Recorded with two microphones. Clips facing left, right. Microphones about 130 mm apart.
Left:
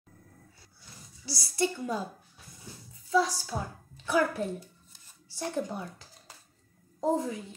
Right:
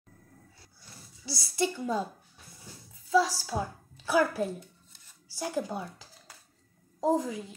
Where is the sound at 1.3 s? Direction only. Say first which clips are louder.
Even; 25° right (ahead or behind).